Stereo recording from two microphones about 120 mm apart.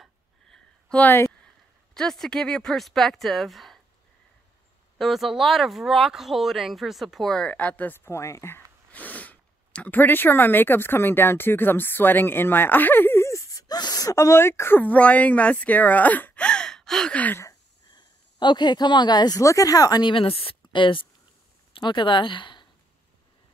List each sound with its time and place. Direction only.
0.0 s a sound: 5° left (ahead or behind)
2.0 s speech: 5° left (ahead or behind)
4.9 s speech: centre (ahead or behind)
17.9 s speech: 40° left (ahead or behind)